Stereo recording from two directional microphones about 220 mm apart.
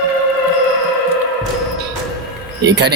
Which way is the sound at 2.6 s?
50° right (ahead or behind).